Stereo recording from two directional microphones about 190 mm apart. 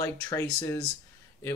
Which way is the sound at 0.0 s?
15° left (ahead or behind).